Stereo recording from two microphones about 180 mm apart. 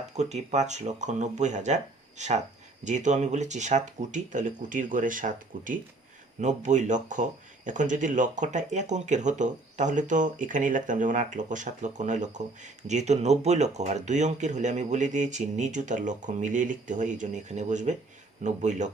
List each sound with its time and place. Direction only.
0.2 s speech: 40° right (ahead or behind)